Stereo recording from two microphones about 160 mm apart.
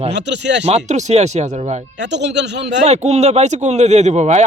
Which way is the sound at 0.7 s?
45° right (ahead or behind).